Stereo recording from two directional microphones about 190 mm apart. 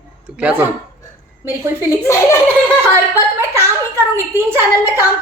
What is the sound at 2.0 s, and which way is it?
Speech, 15° left (ahead or behind).